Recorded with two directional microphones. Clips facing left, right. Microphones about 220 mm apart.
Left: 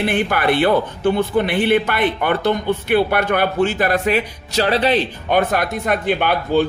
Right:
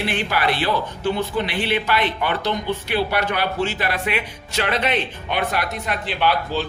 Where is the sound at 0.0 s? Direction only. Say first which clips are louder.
Left 4 dB; 55° left (ahead or behind); by 5.4 s 35° left (ahead or behind).